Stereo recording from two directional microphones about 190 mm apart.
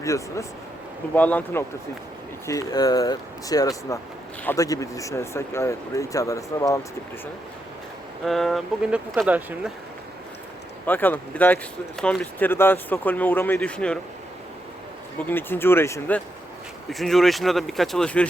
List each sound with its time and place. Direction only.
0.0 s speech: 15° left (ahead or behind)
8.2 s speech: centre (ahead or behind)
10.8 s speech: 10° left (ahead or behind)
15.3 s speech: 10° left (ahead or behind)